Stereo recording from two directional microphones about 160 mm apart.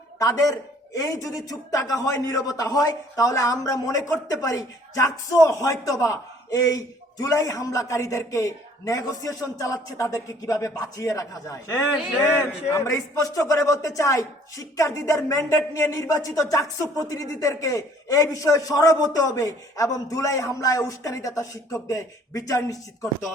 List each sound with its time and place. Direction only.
0.2 s a man's voice: 20° left (ahead or behind)